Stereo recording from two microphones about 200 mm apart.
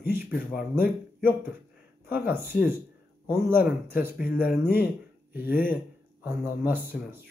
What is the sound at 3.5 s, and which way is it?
Speech, 10° right (ahead or behind).